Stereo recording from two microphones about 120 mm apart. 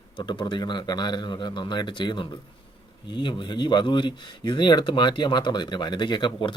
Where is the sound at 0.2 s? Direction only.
40° left (ahead or behind).